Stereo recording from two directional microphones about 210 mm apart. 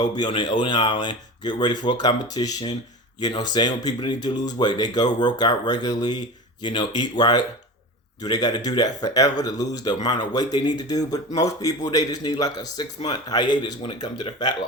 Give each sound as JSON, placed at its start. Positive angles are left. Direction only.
{"t": 0.2, "sound": "speech", "side_deg": 20}